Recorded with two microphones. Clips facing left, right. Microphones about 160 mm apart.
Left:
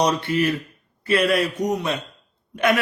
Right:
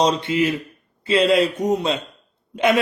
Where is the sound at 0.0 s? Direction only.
20° right (ahead or behind).